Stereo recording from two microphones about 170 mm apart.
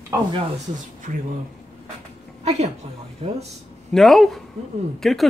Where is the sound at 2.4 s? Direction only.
40° right (ahead or behind).